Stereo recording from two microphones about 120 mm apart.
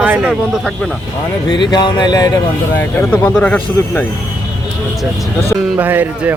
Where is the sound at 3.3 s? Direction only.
10° left (ahead or behind).